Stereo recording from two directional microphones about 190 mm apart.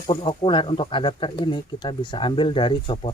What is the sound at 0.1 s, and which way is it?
Speech, 30° left (ahead or behind).